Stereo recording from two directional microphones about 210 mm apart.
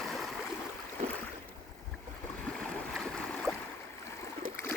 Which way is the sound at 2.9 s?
5° left (ahead or behind).